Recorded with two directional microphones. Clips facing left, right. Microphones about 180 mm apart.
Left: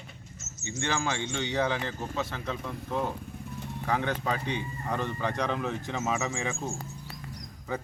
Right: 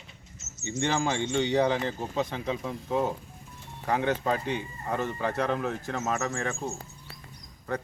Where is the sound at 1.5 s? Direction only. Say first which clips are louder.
Right 2 dB; 15° right (ahead or behind).